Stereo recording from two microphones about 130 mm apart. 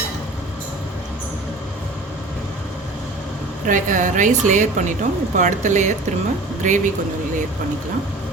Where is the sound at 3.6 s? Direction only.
80° right.